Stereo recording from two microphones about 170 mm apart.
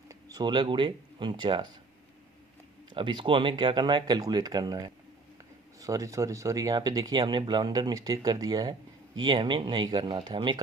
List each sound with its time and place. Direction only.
0.1 s speech: 20° right (ahead or behind)
2.9 s speech: 30° right (ahead or behind)